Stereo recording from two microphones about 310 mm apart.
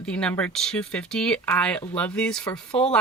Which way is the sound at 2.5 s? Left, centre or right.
Centre.